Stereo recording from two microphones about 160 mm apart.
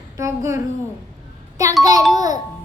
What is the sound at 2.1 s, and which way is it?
Music, 25° right (ahead or behind).